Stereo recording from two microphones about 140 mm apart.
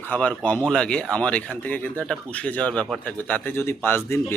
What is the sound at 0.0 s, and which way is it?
Speech, 10° left (ahead or behind).